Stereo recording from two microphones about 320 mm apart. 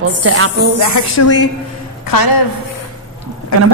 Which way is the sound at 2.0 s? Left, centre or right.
Left.